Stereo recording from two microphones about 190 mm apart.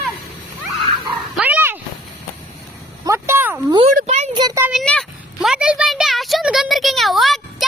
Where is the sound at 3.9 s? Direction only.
35° right (ahead or behind).